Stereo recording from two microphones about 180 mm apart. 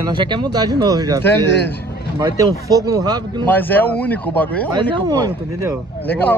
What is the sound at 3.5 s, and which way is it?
Speech, 10° left (ahead or behind).